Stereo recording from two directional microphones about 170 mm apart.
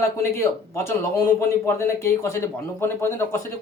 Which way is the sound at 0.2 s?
15° left (ahead or behind).